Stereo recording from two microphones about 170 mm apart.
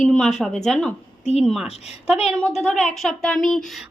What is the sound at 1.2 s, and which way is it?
Speech, 40° left (ahead or behind).